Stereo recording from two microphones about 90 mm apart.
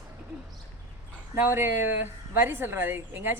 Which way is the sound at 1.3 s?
25° right (ahead or behind).